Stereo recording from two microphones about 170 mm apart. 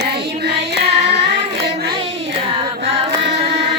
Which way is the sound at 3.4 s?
90° right.